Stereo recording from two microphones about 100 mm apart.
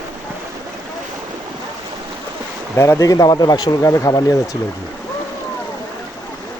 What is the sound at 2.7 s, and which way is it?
Speech, 30° left (ahead or behind).